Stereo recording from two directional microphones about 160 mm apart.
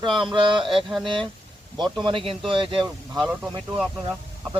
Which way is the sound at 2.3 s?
30° right (ahead or behind).